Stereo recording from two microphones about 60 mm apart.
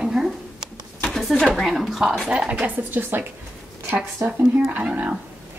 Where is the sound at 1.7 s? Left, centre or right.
Centre.